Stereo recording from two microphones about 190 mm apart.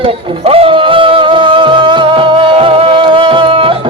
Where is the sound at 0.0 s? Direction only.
30° right (ahead or behind).